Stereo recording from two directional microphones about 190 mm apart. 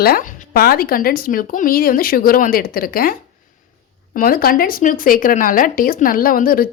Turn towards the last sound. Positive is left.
turn(degrees=50)  # may be behind; listen again after turning